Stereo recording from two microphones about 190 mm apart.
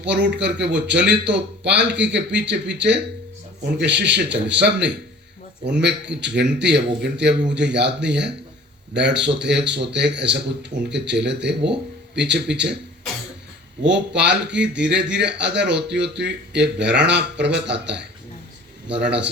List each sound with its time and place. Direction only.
0.1 s a man's voice: 65° right (ahead or behind)
13.8 s a man's voice: 65° right (ahead or behind)